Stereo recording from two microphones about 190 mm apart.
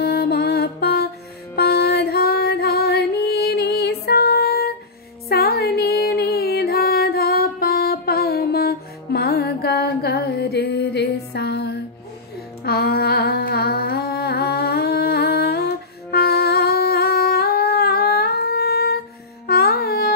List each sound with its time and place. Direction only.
0.0 s music: 55° left (ahead or behind)